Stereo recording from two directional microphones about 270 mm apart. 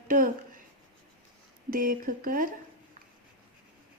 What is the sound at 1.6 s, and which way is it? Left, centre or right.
Speech, right.